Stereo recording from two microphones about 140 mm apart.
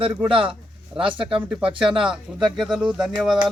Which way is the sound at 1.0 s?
40° right (ahead or behind).